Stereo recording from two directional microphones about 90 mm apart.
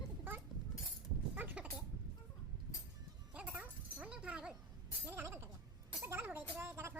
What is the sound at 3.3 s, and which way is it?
Dog, 15° right (ahead or behind).